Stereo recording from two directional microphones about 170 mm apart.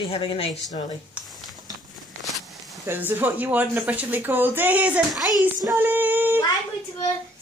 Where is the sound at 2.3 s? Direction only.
Centre (ahead or behind).